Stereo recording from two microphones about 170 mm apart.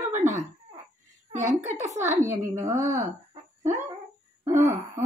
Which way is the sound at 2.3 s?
15° right (ahead or behind).